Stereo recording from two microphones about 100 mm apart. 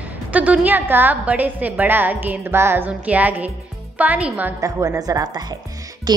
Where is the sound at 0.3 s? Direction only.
15° right (ahead or behind).